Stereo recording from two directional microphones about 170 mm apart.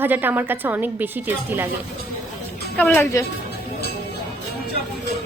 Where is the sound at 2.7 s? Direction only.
10° left (ahead or behind).